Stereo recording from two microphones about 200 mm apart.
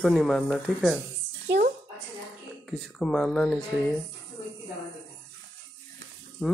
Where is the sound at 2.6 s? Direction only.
Centre (ahead or behind).